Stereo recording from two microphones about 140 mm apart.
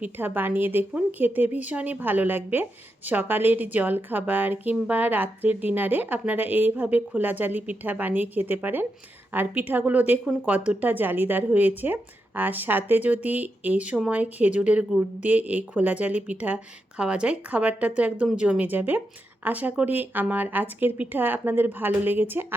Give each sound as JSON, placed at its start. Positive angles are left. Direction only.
{"t": 0.0, "sound": "a woman's voice", "side_deg": -15}